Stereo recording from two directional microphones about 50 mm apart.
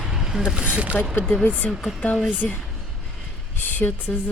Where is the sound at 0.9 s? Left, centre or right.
Centre.